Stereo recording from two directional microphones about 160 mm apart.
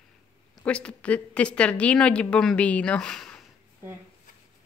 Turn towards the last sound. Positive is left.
turn(degrees=5)  # may be behind; listen again after turning